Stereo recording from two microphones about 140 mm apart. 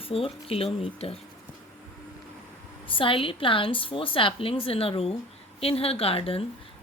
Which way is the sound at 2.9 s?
40° left (ahead or behind).